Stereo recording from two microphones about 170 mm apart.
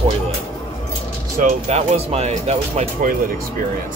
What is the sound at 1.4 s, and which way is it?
Speech, 40° right (ahead or behind).